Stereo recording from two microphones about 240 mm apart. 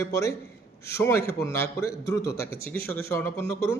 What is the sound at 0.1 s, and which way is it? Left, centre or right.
A man's voice, centre.